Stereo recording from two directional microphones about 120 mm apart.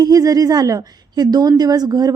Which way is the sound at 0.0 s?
30° right (ahead or behind).